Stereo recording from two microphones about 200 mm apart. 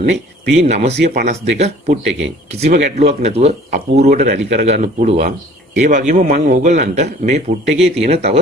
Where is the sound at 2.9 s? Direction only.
30° right (ahead or behind).